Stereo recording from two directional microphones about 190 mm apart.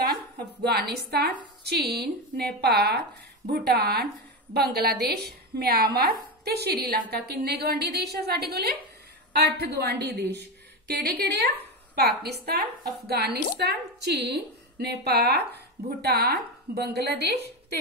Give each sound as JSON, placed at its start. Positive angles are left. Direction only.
{"t": 0.1, "sound": "a woman's voice", "side_deg": -55}